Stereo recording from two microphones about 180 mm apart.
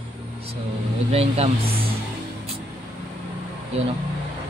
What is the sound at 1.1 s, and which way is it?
Speech, 35° right (ahead or behind).